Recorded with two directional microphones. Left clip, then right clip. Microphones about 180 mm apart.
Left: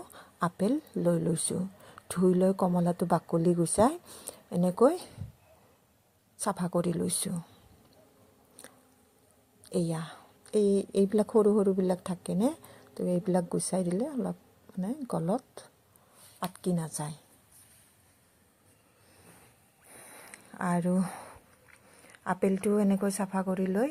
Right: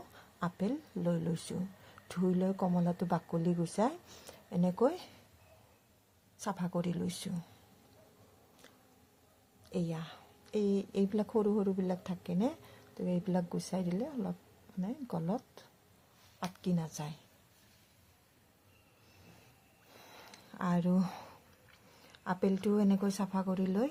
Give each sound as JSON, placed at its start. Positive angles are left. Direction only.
{"t": 0.1, "sound": "a woman's voice", "side_deg": 35}
{"t": 6.4, "sound": "a woman's voice", "side_deg": 30}
{"t": 9.6, "sound": "a woman's voice", "side_deg": 30}
{"t": 19.9, "sound": "a sound", "side_deg": 10}
{"t": 22.2, "sound": "a woman's voice", "side_deg": 20}